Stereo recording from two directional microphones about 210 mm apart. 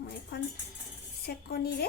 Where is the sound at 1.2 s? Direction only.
45° left (ahead or behind).